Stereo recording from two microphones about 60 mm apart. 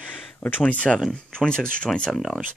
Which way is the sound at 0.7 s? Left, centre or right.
Left.